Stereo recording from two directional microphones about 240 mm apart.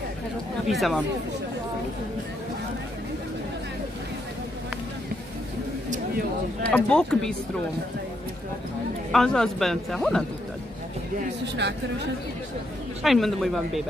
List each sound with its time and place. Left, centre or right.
0.7 s speech: centre
5.9 s a sound: right
6.7 s speech: centre
9.1 s speech: centre
11.4 s speech: right
13.0 s speech: centre